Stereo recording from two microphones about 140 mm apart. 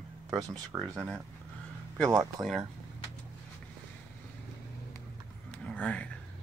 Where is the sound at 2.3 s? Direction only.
Centre (ahead or behind).